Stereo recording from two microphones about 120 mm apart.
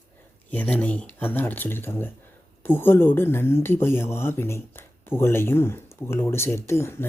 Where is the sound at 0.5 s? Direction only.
10° left (ahead or behind).